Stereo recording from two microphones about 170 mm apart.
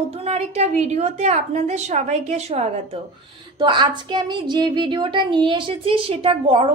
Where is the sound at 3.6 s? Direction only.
25° right (ahead or behind).